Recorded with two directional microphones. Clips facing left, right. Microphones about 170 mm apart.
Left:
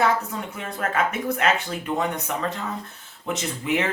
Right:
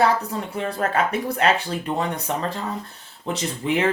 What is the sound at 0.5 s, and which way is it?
Speech, 35° right (ahead or behind).